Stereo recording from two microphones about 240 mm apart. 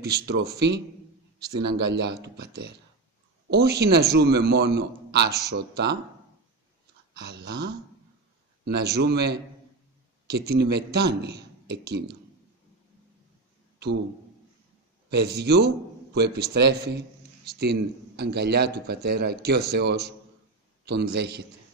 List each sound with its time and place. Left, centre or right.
0.0 s a man's voice: right
7.2 s a man's voice: right
15.0 s a man's voice: right